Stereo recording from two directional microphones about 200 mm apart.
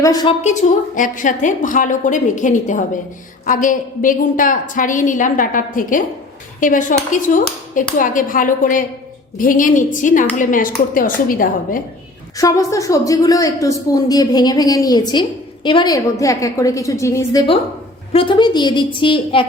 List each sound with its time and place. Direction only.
0.0 s a woman's voice: 20° left (ahead or behind)
0.4 s a woman's voice: 40° left (ahead or behind)
12.4 s speech: 15° left (ahead or behind)
18.1 s a woman's voice: 25° left (ahead or behind)